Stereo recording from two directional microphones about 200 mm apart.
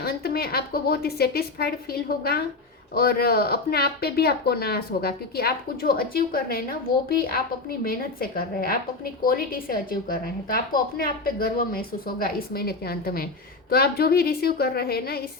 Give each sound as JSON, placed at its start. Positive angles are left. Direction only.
{"t": 0.0, "sound": "speech", "side_deg": 50}